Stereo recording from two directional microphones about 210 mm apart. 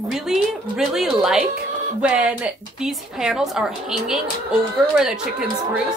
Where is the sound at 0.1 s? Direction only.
Centre (ahead or behind).